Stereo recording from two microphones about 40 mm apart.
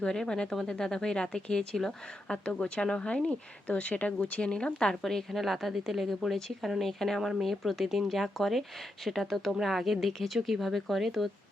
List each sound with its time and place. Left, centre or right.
0.0 s speech: centre
3.2 s a woman's voice: left
5.0 s speech: centre
6.8 s speech: centre